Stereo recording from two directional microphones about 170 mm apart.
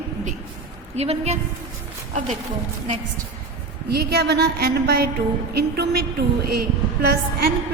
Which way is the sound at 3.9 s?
65° right (ahead or behind).